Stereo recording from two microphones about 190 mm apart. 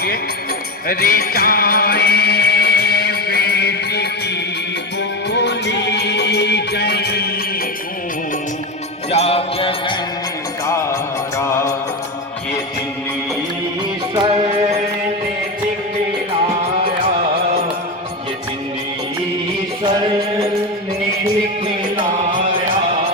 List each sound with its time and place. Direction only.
0.9 s music: 50° left (ahead or behind)
5.3 s music: 65° left (ahead or behind)
9.0 s music: 30° left (ahead or behind)
11.3 s music: 15° left (ahead or behind)
14.2 s music: 30° right (ahead or behind)